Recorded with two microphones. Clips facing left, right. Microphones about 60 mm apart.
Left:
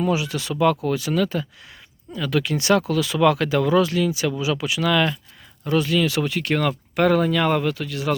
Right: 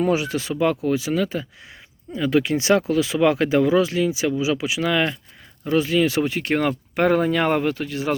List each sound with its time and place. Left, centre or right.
0.0 s speech: right
0.5 s speech: centre
2.1 s speech: right